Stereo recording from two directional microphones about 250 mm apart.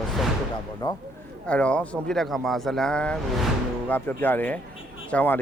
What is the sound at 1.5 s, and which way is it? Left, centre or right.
Speech, centre.